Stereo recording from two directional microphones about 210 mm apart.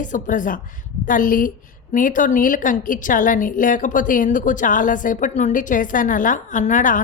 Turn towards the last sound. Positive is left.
turn(degrees=40)  # may be behind; listen again after turning